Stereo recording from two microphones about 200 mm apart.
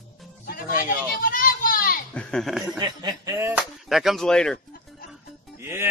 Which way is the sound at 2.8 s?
20° right (ahead or behind).